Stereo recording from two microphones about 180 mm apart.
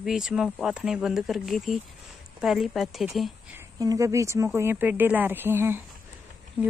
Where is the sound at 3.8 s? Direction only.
20° right (ahead or behind).